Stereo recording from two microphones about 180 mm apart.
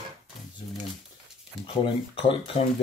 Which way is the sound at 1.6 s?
30° left (ahead or behind).